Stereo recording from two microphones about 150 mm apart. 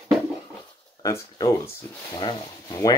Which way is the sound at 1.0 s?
20° left (ahead or behind).